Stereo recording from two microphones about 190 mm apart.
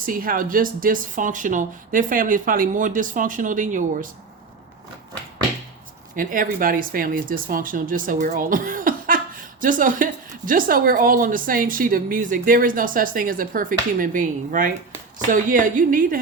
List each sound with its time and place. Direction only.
0.0 s speech: 45° right (ahead or behind)
6.1 s speech: 45° right (ahead or behind)